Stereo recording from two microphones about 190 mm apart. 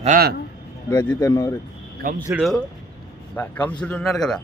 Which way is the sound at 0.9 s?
15° left (ahead or behind).